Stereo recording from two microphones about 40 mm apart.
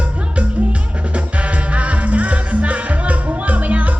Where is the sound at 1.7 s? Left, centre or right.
Right.